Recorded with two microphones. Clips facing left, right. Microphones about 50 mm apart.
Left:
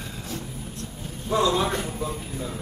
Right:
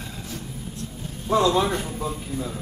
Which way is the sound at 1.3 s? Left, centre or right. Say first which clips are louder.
Right 2 dB; centre.